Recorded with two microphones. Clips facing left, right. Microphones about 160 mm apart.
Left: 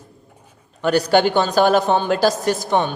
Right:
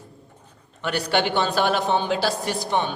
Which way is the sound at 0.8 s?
40° left (ahead or behind).